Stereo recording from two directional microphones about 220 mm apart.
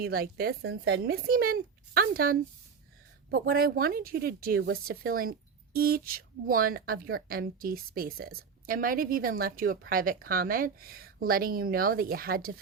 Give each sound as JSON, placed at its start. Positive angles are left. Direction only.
{"t": 0.0, "sound": "speech", "side_deg": -45}